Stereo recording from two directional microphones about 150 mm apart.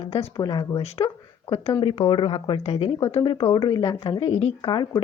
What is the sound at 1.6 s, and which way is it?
Speech, 35° left (ahead or behind).